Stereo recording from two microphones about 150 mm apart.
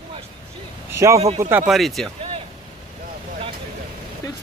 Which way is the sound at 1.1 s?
45° right (ahead or behind).